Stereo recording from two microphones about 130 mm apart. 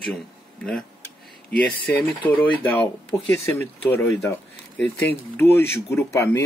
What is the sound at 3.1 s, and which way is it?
Speech, 25° left (ahead or behind).